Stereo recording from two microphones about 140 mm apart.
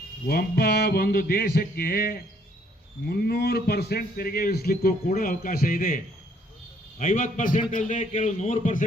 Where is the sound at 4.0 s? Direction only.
90° left; by 8.8 s 65° left (ahead or behind).